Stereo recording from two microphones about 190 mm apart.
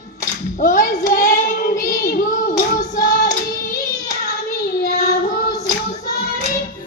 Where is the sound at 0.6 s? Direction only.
45° left (ahead or behind).